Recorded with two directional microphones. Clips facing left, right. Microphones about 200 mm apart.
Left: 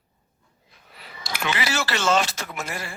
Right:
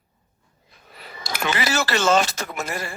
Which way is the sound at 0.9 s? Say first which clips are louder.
Right 2 dB; 45° right (ahead or behind).